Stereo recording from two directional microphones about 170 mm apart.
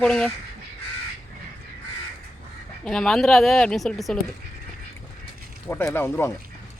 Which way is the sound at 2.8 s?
5° left (ahead or behind).